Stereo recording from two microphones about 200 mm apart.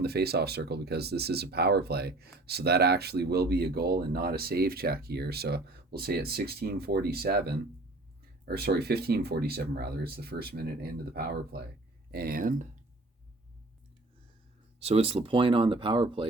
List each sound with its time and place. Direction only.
0.0 s speech: 55° right (ahead or behind)
14.8 s speech: 30° right (ahead or behind)